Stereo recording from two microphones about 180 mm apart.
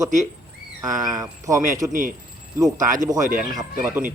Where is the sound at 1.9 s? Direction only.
45° right (ahead or behind).